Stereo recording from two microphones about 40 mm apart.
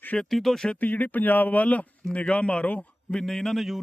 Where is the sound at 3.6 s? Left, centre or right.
Centre.